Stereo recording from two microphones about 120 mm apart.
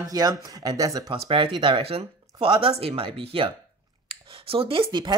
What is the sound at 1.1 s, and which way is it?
Speech, 50° right (ahead or behind).